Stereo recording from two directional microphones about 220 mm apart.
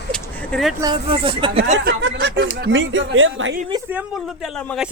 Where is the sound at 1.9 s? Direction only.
55° right (ahead or behind).